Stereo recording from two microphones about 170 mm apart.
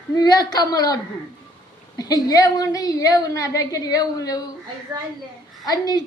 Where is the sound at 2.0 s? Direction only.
20° left (ahead or behind).